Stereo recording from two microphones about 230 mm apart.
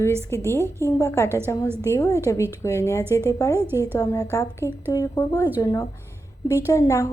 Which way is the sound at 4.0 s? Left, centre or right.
Centre.